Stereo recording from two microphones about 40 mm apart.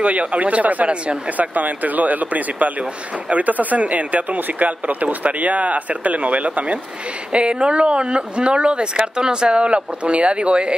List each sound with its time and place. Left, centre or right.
0.0 s speech: right